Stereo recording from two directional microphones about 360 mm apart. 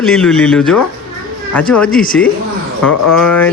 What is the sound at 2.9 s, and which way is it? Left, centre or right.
Speech, left.